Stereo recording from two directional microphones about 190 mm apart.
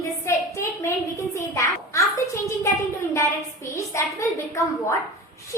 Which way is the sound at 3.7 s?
15° left (ahead or behind).